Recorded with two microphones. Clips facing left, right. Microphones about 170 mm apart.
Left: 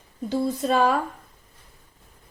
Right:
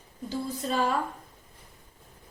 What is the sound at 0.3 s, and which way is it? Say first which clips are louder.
Speech: left 8 dB; 75° left (ahead or behind).